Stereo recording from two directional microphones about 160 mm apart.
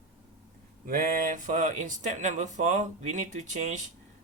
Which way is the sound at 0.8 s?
60° right (ahead or behind).